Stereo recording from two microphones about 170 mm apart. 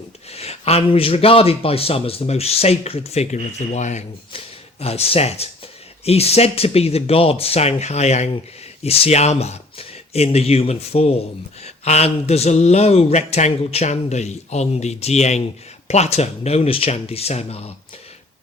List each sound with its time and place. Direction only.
0.3 s a man's voice: 35° left (ahead or behind)